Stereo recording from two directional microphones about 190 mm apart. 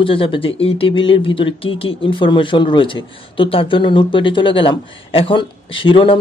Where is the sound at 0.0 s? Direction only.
30° left (ahead or behind).